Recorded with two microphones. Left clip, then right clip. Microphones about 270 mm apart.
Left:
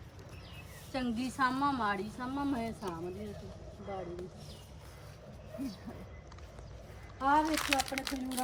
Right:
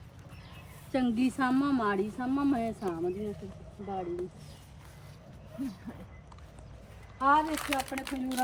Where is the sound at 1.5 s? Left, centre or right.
Right.